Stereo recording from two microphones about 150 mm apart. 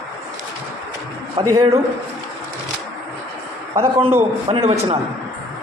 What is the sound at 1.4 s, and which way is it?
Speech, 35° right (ahead or behind).